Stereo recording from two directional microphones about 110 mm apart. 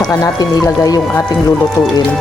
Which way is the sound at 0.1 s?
35° left (ahead or behind).